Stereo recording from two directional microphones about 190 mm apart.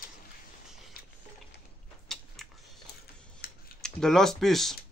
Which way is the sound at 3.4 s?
55° left (ahead or behind).